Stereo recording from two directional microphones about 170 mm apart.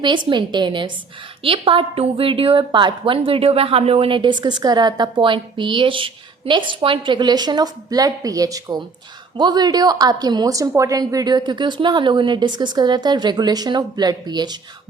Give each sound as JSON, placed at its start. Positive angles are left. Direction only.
{"t": 0.0, "sound": "a woman's voice", "side_deg": -25}